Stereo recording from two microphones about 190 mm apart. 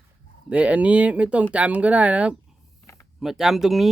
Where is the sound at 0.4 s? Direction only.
5° right (ahead or behind).